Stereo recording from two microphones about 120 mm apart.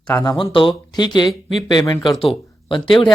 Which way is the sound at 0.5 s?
45° left (ahead or behind).